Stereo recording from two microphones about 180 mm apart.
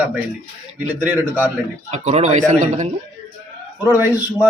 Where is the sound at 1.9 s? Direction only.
40° right (ahead or behind).